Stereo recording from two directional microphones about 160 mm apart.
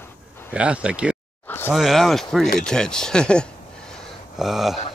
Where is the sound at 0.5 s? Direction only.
5° right (ahead or behind).